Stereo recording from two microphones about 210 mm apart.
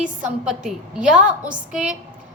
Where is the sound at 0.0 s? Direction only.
5° right (ahead or behind).